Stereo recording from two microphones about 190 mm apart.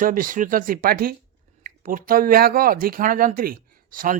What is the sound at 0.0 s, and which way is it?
Speech, 45° right (ahead or behind).